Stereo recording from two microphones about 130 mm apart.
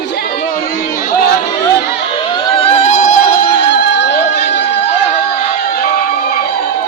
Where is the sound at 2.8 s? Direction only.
85° left.